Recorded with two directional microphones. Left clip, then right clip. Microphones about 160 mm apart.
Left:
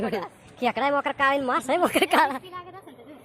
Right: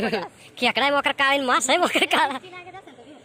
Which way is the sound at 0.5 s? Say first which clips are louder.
Right 3 dB; 5° right (ahead or behind).